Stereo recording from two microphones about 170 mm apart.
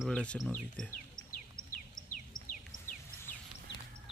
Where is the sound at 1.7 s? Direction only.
50° left (ahead or behind).